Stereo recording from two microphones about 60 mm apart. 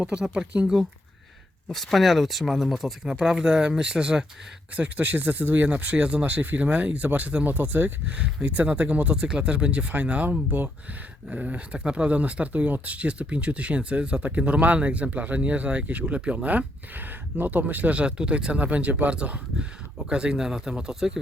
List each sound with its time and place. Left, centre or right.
0.0 s speech: centre
1.6 s speech: centre
4.8 s speech: right; by 21.2 s centre